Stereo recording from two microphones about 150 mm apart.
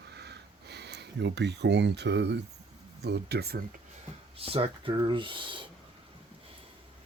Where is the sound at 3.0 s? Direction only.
90° right.